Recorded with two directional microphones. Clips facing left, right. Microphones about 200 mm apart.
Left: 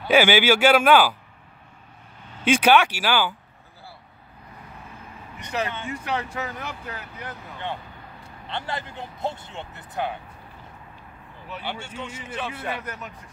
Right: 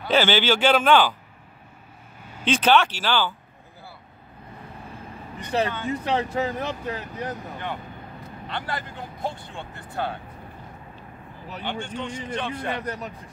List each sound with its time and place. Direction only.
0.1 s a man's voice: 10° left (ahead or behind)
2.4 s a man's voice: 10° left (ahead or behind)
5.4 s speech: 30° right (ahead or behind)
8.2 s speech: 25° left (ahead or behind)
11.6 s a man's voice: 10° left (ahead or behind)
12.8 s speech: 35° right (ahead or behind)